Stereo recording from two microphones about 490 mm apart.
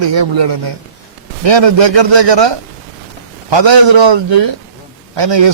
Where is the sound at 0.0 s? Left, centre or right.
Right.